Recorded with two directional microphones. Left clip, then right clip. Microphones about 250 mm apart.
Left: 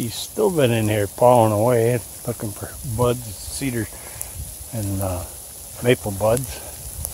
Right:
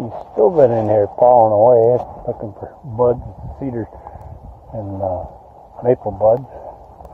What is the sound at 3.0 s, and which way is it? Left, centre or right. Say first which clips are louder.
Speech: right 6 dB; left.